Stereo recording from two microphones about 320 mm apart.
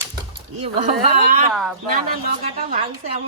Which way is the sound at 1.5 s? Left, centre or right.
Centre.